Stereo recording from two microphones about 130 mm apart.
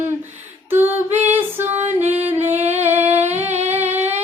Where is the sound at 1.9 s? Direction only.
15° right (ahead or behind).